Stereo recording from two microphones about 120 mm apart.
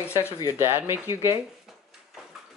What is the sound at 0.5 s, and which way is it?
Speech, 20° right (ahead or behind).